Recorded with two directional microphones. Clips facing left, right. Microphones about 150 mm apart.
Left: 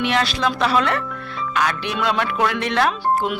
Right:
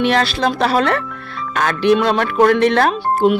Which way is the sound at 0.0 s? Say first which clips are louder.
Right 4 dB; 35° right (ahead or behind).